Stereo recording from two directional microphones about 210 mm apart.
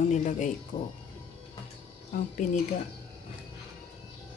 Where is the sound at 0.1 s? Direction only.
35° left (ahead or behind).